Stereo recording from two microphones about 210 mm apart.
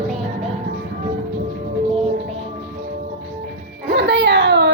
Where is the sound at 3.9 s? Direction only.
55° right (ahead or behind).